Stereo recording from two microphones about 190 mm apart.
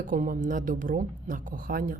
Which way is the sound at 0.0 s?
45° right (ahead or behind).